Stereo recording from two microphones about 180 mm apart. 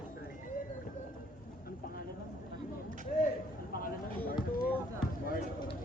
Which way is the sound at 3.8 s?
50° left (ahead or behind).